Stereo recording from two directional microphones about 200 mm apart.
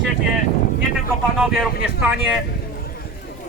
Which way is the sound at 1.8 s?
5° right (ahead or behind).